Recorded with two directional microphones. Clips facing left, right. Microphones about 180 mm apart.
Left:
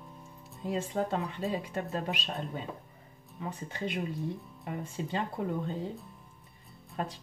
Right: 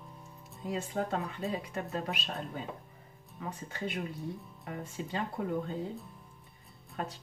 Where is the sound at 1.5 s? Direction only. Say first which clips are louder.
Left 2 dB; 35° left (ahead or behind).